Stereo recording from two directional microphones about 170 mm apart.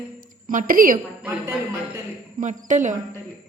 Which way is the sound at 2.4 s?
45° right (ahead or behind).